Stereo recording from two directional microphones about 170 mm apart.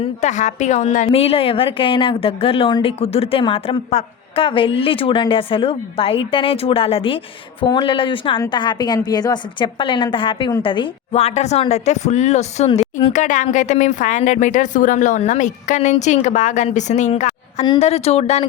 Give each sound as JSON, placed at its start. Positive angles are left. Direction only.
{"t": 0.0, "sound": "a woman's voice", "side_deg": 45}